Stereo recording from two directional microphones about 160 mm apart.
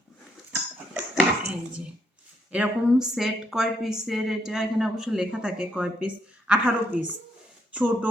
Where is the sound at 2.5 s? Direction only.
5° right (ahead or behind).